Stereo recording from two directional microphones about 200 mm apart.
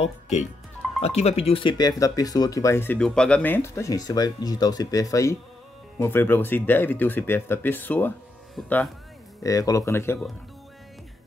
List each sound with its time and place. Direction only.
0.0 s speech: 35° left (ahead or behind); by 8.9 s 5° left (ahead or behind)
9.4 s speech: 15° left (ahead or behind)